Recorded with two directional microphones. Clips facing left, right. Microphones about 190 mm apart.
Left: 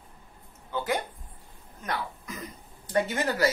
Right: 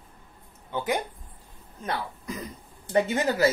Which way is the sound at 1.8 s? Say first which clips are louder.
Right 2 dB; 30° right (ahead or behind).